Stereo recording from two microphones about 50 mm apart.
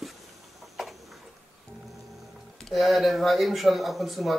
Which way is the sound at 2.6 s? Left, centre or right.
Centre.